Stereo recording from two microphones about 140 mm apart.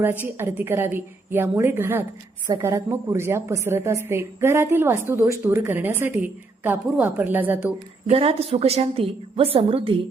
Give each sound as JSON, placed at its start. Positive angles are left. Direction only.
{"t": 0.3, "sound": "a woman's voice", "side_deg": -15}
{"t": 8.1, "sound": "a woman's voice", "side_deg": -45}